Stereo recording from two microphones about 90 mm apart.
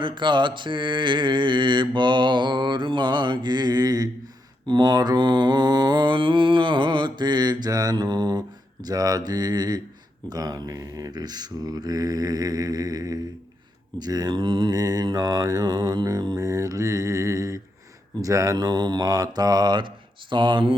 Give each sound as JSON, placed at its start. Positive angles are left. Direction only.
{"t": 0.0, "sound": "mantra", "side_deg": -60}